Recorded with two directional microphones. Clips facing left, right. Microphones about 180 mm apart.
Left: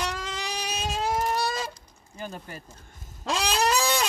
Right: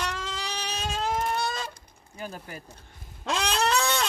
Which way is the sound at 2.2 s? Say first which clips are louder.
Even; 5° right (ahead or behind).